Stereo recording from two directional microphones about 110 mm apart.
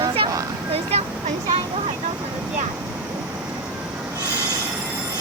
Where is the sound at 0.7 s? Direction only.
70° right (ahead or behind).